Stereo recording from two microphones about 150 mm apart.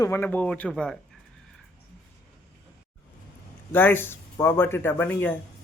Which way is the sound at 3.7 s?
15° left (ahead or behind).